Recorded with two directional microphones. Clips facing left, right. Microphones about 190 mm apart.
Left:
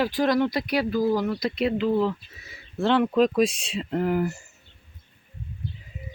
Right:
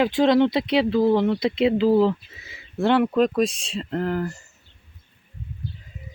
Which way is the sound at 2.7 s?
10° right (ahead or behind).